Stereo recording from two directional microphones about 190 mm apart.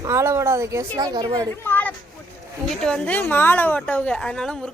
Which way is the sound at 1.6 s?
10° left (ahead or behind).